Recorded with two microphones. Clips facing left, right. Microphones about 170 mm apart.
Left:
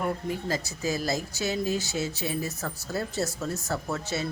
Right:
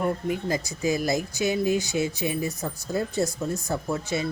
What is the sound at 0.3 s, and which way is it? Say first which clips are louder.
Speech: right 3 dB; 15° right (ahead or behind).